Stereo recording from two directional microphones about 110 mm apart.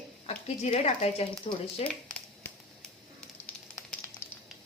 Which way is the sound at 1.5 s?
60° left (ahead or behind).